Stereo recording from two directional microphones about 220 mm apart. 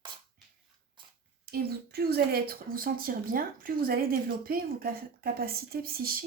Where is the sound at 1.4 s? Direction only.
45° right (ahead or behind).